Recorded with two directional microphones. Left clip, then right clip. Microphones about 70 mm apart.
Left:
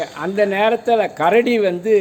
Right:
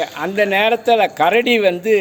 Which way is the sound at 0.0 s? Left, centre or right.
Left.